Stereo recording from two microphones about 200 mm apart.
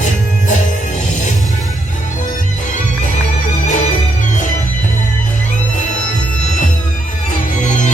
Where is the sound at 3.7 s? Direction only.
35° left (ahead or behind).